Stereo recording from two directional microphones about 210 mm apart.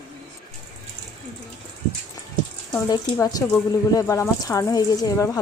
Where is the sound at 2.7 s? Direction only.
15° left (ahead or behind).